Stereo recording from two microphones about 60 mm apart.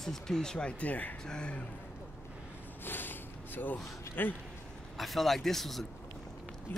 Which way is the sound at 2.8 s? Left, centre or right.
Left.